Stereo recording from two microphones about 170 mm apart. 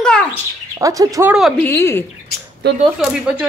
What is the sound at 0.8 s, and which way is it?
Speech, 20° right (ahead or behind).